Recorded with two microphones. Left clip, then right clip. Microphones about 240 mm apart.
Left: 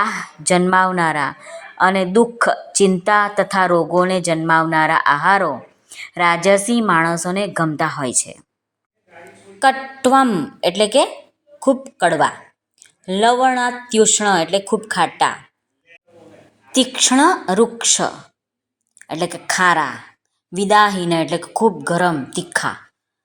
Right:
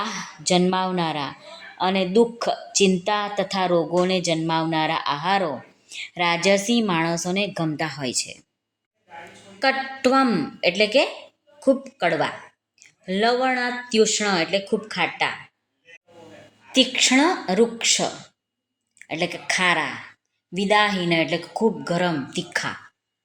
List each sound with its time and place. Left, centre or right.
0.0 s a woman's voice: centre
9.6 s speech: centre
16.7 s speech: left